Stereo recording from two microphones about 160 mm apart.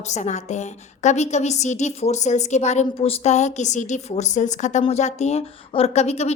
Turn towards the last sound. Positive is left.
turn(degrees=45)  # may be behind; listen again after turning